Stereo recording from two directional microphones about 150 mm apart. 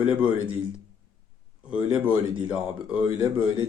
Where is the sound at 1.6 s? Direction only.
10° right (ahead or behind).